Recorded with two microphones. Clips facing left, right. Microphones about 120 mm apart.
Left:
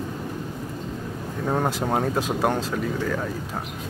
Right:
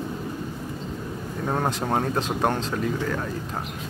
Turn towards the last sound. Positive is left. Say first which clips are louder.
# even
turn(degrees=0)  # may be behind; listen again after turning